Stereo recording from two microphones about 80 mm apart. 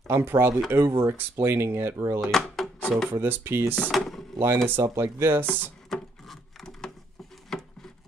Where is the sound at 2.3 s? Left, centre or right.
Centre.